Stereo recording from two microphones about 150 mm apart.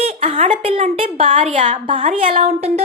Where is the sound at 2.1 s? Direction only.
40° right (ahead or behind).